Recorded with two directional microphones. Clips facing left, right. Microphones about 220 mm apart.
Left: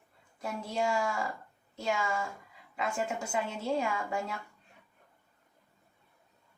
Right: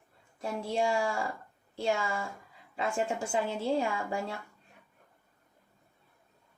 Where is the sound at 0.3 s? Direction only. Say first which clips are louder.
Right 3 dB; 30° right (ahead or behind).